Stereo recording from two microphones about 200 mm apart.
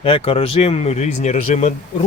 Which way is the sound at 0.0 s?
30° left (ahead or behind).